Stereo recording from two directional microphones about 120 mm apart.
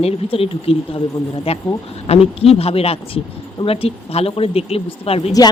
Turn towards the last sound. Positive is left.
turn(degrees=55)  # may be behind; listen again after turning